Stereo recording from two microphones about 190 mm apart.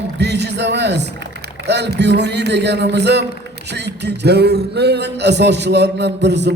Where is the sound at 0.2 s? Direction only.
65° right (ahead or behind).